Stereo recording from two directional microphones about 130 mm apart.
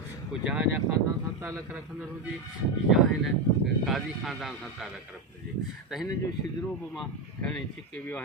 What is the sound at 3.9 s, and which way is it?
Speech, centre (ahead or behind).